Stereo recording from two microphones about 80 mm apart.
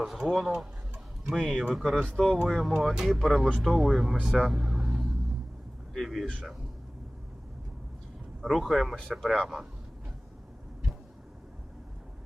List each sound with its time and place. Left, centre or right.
0.3 s speech: centre
4.4 s vehicle: centre
5.9 s speech: centre
8.4 s speech: centre